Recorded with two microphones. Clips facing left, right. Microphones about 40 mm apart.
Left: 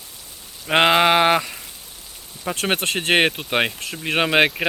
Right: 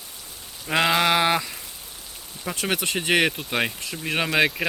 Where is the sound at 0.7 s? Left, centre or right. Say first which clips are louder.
Left 5 dB; left.